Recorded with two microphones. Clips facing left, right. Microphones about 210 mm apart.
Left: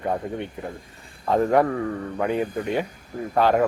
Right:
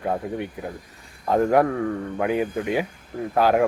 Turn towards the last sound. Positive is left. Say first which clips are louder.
# even
turn(degrees=-5)  # may be behind; listen again after turning